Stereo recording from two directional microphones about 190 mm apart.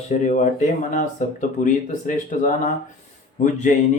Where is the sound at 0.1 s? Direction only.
40° left (ahead or behind).